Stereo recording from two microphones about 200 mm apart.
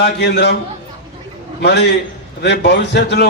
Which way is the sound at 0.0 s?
60° left (ahead or behind).